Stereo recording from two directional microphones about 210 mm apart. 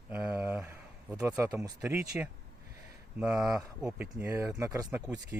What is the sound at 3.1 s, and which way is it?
Speech, centre (ahead or behind).